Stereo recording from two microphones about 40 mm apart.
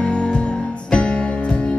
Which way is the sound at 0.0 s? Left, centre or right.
Left.